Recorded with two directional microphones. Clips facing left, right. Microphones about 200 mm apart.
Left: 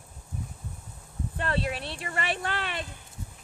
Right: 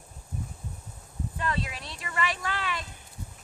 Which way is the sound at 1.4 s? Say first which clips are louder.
Left 3 dB; 65° left (ahead or behind).